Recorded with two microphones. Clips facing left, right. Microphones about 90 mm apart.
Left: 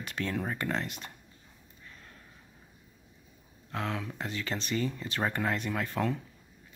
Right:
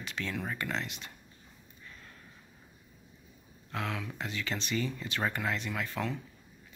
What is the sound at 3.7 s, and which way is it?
Speech, 35° left (ahead or behind).